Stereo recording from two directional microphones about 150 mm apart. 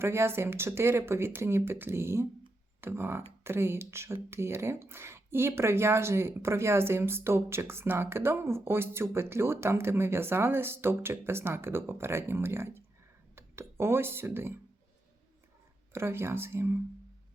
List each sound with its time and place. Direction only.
0.0 s speech: 15° right (ahead or behind)
15.9 s speech: 15° right (ahead or behind)